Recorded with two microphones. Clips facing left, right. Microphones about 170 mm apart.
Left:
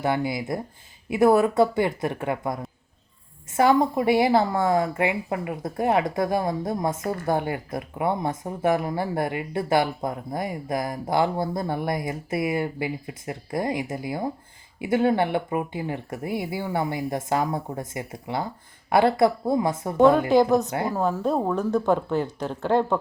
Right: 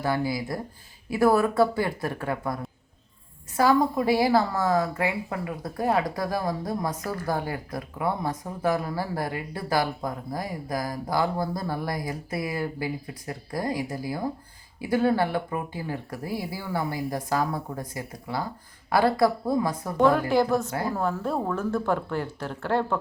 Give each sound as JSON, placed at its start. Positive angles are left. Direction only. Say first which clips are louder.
{"t": 0.0, "sound": "a woman's voice", "louder": "left 2 dB", "side_deg": 20}